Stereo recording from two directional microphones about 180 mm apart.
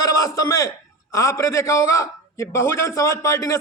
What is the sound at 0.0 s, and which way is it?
A man's voice, 20° left (ahead or behind).